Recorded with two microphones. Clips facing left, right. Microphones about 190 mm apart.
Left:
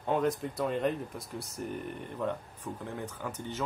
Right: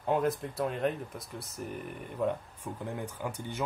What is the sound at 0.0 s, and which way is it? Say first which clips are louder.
Speech: even; 5° right (ahead or behind).